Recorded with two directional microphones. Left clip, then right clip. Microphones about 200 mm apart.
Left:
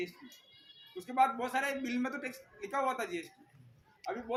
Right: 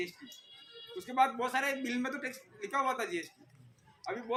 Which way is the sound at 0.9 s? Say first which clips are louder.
Even; 20° left (ahead or behind).